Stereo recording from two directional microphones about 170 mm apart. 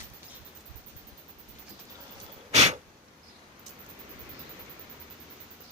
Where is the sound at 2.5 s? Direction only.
40° right (ahead or behind).